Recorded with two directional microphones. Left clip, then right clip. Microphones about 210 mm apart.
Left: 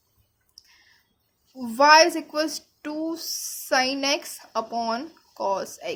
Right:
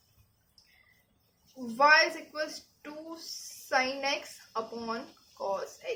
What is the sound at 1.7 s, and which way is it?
A woman's voice, 50° left (ahead or behind).